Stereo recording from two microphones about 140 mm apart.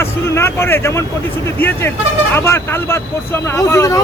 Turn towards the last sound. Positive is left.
turn(degrees=20)  # may be behind; listen again after turning